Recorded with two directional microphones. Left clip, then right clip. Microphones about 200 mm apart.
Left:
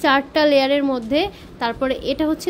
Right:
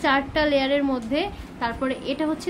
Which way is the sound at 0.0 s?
35° left (ahead or behind).